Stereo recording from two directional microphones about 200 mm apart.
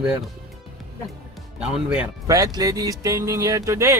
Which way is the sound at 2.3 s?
15° right (ahead or behind).